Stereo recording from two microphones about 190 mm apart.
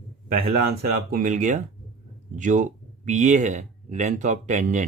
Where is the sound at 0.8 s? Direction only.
50° right (ahead or behind).